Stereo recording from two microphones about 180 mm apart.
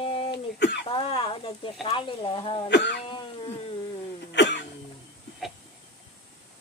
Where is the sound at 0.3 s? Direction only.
70° left (ahead or behind).